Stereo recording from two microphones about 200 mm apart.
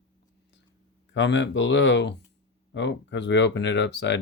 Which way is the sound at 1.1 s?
65° left (ahead or behind).